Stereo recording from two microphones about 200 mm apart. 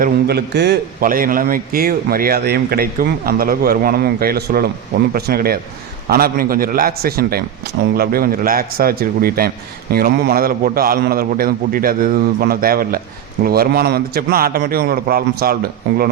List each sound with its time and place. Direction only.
0.0 s a man's voice: 50° right (ahead or behind)